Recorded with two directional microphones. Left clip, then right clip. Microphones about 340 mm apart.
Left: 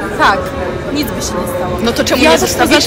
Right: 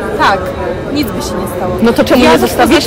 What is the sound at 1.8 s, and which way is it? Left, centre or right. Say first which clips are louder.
Speech: right 3 dB; right.